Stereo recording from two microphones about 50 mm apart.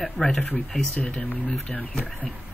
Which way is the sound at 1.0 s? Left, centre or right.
Left.